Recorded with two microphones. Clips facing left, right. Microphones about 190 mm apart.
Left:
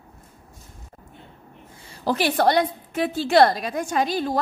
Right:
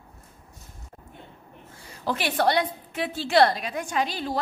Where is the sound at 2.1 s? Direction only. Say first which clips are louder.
Left 4 dB; 40° left (ahead or behind).